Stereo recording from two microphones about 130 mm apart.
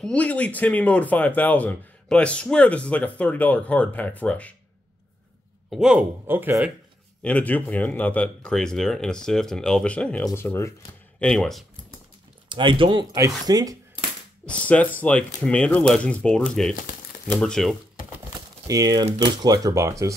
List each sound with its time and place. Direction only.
0.0 s speech: 10° left (ahead or behind)
5.7 s speech: 5° right (ahead or behind)
6.2 s speech: 15° right (ahead or behind)
7.2 s speech: 10° left (ahead or behind)
11.1 s speech: 5° left (ahead or behind)
12.4 s speech: 40° right (ahead or behind)
14.4 s speech: 10° left (ahead or behind)
16.7 s crumpling: 70° left (ahead or behind)
17.4 s speech: 5° left (ahead or behind)
18.7 s speech: 30° right (ahead or behind)